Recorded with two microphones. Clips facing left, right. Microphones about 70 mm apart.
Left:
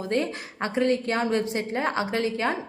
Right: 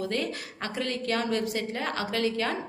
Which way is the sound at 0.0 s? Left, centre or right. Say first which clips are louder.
Left 4 dB; left.